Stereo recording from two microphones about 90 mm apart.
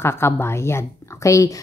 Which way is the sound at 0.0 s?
30° left (ahead or behind).